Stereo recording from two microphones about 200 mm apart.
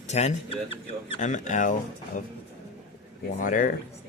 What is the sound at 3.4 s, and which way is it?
Speech, 40° left (ahead or behind).